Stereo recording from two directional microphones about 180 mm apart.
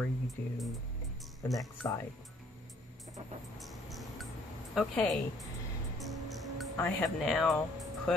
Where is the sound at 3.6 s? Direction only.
Centre (ahead or behind).